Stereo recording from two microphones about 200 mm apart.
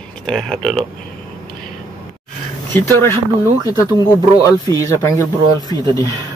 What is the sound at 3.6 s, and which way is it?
Speech, 15° left (ahead or behind).